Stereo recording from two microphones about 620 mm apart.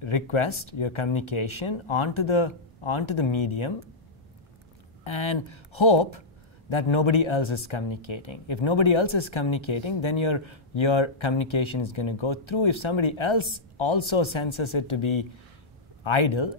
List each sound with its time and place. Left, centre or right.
0.0 s speech: left
5.0 s speech: left